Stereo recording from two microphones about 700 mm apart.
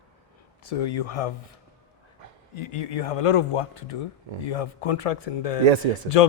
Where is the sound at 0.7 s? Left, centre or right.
Left.